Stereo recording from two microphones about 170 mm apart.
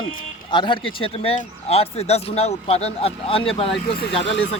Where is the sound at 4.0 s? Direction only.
90° left.